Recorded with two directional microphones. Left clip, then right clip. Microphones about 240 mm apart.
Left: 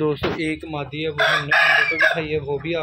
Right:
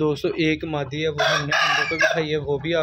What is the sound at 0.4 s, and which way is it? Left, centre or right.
Speech, right.